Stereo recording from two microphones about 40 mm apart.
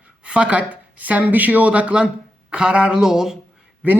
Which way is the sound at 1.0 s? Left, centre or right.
Right.